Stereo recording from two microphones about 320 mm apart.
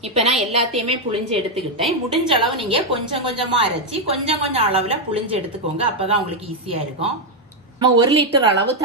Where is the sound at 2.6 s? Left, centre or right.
Centre.